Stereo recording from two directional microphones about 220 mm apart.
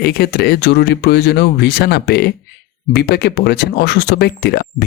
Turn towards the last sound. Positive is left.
turn(degrees=50)  # may be behind; listen again after turning